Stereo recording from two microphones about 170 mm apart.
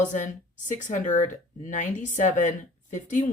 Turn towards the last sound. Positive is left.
turn(degrees=45)  # may be behind; listen again after turning